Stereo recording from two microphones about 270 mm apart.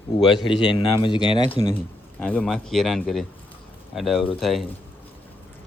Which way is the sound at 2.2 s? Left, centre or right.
Centre.